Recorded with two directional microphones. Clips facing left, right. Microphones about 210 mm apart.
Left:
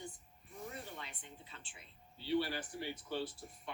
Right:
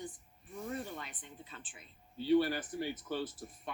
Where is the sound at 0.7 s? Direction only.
50° right (ahead or behind).